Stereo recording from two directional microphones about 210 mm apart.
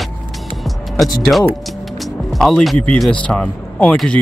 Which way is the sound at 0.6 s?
Centre (ahead or behind).